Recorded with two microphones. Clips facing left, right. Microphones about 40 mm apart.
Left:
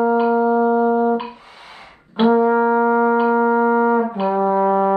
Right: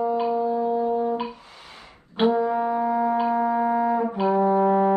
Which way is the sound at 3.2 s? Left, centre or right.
Left.